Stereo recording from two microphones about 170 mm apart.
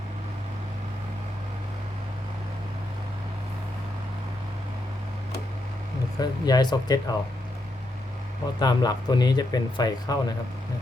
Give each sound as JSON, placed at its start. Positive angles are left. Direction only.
{"t": 6.1, "sound": "speech", "side_deg": 25}
{"t": 8.5, "sound": "speech", "side_deg": 25}